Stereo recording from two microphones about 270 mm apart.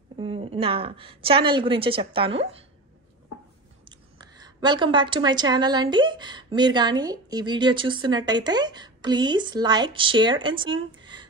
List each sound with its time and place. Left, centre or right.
0.2 s a woman's voice: right
4.2 s a woman's voice: centre